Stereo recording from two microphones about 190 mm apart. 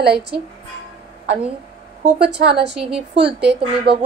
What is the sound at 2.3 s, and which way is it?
Speech, 60° right (ahead or behind).